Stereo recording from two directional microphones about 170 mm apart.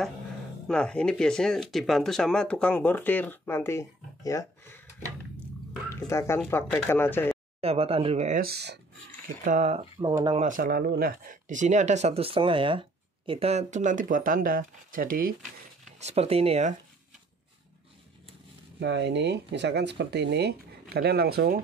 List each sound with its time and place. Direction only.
0.7 s speech: 5° left (ahead or behind)
5.9 s speech: 15° left (ahead or behind)
7.6 s speech: 35° right (ahead or behind)
8.4 s speech: 70° right (ahead or behind)
9.4 s speech: 45° right (ahead or behind)
9.9 s speech: 20° right (ahead or behind)
10.3 s speech: 45° right (ahead or behind)
10.6 s speech: 65° right (ahead or behind)
16.0 s speech: 40° right (ahead or behind)
18.8 s speech: 90° right
20.9 s speech: 65° right (ahead or behind)